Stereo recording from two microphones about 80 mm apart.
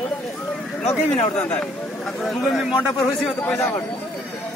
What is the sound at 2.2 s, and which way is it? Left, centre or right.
Speech, centre.